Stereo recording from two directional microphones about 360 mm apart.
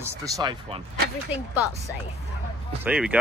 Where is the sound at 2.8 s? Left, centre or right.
Centre.